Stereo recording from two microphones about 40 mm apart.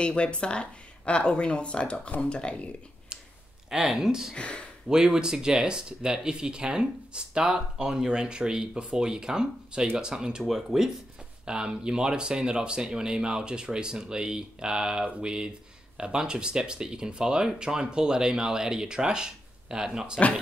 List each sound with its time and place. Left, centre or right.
0.0 s speech: left
3.7 s speech: centre
4.4 s speech: left
4.8 s speech: centre
11.4 s speech: right